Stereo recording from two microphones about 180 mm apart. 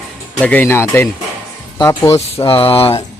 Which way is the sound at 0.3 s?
10° left (ahead or behind).